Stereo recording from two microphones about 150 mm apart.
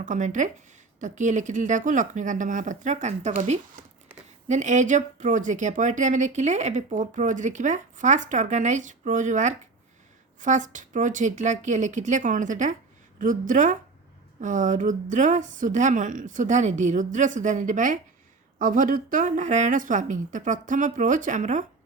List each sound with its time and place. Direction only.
0.0 s speech: 55° right (ahead or behind)